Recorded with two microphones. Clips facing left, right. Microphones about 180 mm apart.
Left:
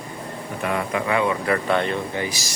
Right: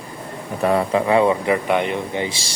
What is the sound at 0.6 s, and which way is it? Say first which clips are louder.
Speech: right 7 dB; 35° right (ahead or behind).